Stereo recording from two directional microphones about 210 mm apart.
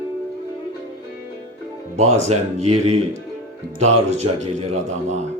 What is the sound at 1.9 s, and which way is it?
A man's voice, 30° right (ahead or behind).